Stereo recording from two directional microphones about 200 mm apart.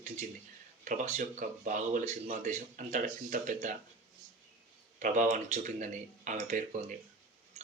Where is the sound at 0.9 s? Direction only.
40° right (ahead or behind).